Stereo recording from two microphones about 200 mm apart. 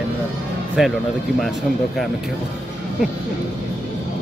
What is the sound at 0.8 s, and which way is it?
Speech, 5° right (ahead or behind).